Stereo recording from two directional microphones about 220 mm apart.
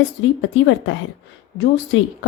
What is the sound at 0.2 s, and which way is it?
Speech, 60° left (ahead or behind).